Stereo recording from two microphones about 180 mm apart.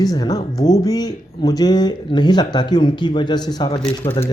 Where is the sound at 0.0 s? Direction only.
20° left (ahead or behind).